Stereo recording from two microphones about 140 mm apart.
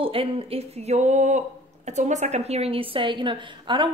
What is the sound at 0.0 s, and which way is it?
A woman's voice, 40° right (ahead or behind).